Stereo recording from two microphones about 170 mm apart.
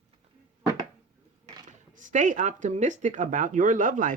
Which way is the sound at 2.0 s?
50° right (ahead or behind).